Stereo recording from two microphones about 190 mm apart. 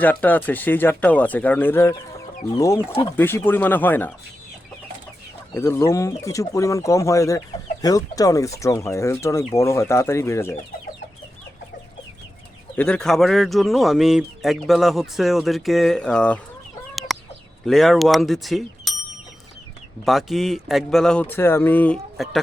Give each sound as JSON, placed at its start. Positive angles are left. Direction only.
{"t": 0.0, "sound": "speech", "side_deg": 10}
{"t": 5.5, "sound": "speech", "side_deg": 15}
{"t": 12.7, "sound": "speech", "side_deg": 5}
{"t": 16.9, "sound": "chicken", "side_deg": 0}
{"t": 17.7, "sound": "speech", "side_deg": 0}
{"t": 20.1, "sound": "speech", "side_deg": 0}